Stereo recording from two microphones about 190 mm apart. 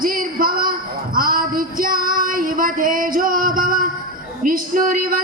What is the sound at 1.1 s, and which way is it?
Female singing, 45° right (ahead or behind).